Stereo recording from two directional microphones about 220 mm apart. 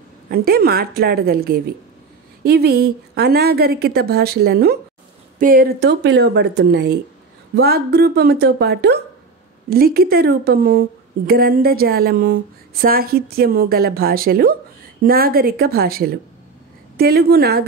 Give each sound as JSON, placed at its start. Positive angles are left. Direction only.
{"t": 0.3, "sound": "speech", "side_deg": -45}